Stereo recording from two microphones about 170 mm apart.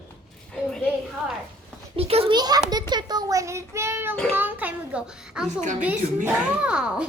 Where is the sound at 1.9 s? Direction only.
35° right (ahead or behind).